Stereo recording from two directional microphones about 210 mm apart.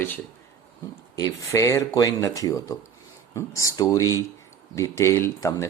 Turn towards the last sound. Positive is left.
turn(degrees=15)  # may be behind; listen again after turning